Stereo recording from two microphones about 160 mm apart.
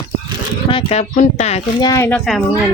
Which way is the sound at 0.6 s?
35° left (ahead or behind).